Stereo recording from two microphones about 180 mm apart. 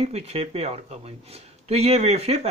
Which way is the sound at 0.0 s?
35° right (ahead or behind).